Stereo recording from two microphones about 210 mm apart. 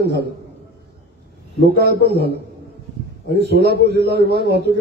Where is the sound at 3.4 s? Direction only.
50° right (ahead or behind).